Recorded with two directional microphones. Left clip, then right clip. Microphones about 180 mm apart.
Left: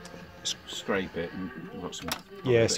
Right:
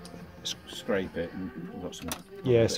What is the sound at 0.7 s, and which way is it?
Speech, 45° left (ahead or behind).